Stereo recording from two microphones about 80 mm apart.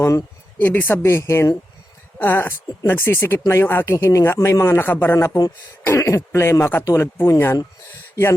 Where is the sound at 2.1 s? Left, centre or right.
Left.